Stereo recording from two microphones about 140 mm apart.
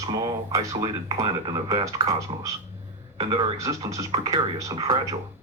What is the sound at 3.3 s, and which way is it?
Speech, 40° right (ahead or behind).